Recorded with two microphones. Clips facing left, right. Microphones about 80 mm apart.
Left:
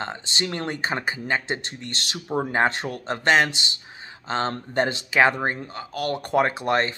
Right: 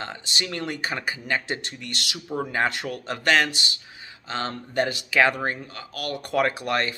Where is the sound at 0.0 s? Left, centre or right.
Left.